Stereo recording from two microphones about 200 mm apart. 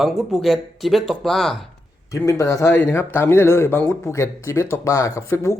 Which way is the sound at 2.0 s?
15° left (ahead or behind).